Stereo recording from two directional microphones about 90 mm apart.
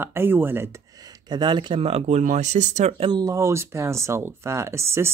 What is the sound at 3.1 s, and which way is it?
Speech, 45° right (ahead or behind).